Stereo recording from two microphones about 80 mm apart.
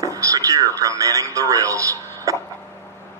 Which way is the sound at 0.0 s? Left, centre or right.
Right.